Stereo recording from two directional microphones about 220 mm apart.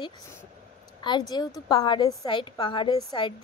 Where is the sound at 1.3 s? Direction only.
20° left (ahead or behind).